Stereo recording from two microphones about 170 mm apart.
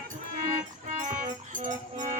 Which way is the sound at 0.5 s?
45° right (ahead or behind).